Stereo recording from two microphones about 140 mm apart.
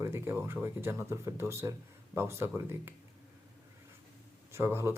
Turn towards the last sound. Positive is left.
turn(degrees=-20)  # may be behind; listen again after turning